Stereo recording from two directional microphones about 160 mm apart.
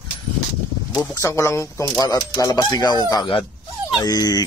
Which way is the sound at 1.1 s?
20° left (ahead or behind).